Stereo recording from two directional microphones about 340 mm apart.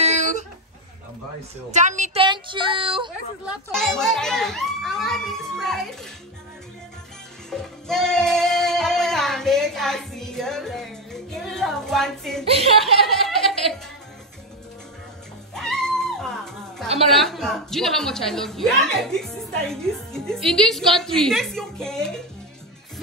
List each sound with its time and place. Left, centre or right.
0.0 s a sound: right
1.7 s speech: right
3.7 s speech: centre
7.4 s music: centre
12.4 s speech: centre
12.8 s a sound: centre
15.5 s music: centre
17.1 s speech: centre